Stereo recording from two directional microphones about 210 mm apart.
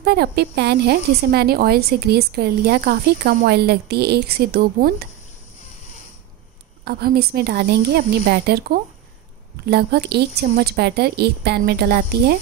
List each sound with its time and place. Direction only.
0.0 s a woman's voice: 50° right (ahead or behind)
6.8 s a woman's voice: 50° right (ahead or behind)